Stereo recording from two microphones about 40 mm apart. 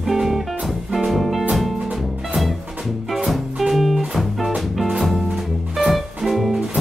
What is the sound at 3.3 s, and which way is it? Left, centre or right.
Music, centre.